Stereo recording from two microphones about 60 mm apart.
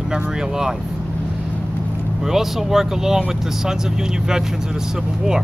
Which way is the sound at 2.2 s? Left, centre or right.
Centre.